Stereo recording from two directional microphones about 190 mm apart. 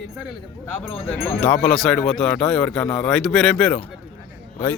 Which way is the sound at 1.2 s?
10° left (ahead or behind).